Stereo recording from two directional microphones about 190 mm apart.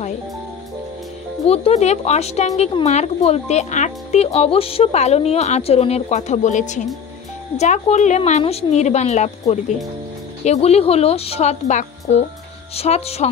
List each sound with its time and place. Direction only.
1.5 s speech: 35° left (ahead or behind)